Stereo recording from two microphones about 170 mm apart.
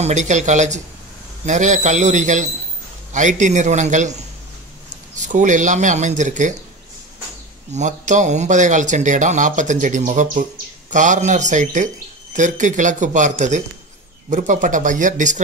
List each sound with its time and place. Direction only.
0.0 s speech: 45° right (ahead or behind)
7.7 s speech: 45° right (ahead or behind)